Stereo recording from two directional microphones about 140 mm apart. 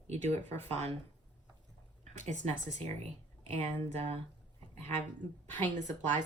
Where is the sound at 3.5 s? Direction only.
50° right (ahead or behind).